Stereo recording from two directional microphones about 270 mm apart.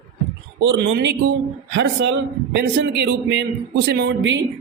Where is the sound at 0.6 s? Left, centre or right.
Right.